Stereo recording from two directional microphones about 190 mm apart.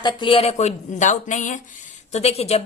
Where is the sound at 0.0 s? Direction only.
25° left (ahead or behind).